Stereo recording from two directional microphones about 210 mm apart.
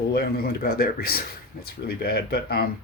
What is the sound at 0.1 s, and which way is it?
Speech, 45° left (ahead or behind).